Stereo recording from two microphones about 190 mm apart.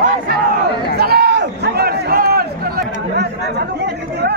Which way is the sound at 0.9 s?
55° right (ahead or behind).